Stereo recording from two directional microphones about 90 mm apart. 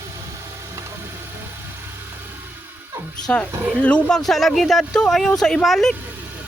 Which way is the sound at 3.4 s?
20° right (ahead or behind).